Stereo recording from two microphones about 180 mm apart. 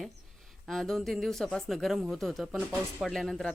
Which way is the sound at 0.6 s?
Centre (ahead or behind).